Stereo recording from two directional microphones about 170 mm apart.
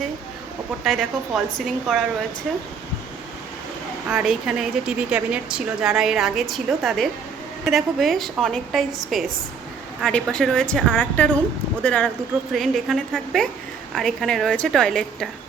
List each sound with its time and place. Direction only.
0.9 s a woman's voice: centre (ahead or behind)
4.1 s a woman's voice: 5° right (ahead or behind)